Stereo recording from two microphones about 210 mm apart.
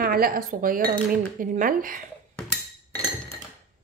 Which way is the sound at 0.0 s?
45° right (ahead or behind).